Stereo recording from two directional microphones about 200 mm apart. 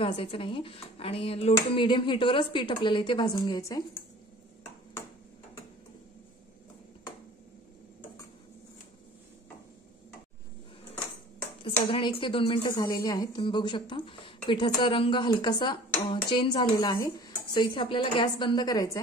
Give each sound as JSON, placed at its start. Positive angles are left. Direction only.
{"t": 0.0, "sound": "a woman's voice", "side_deg": 25}
{"t": 11.9, "sound": "a woman's voice", "side_deg": 25}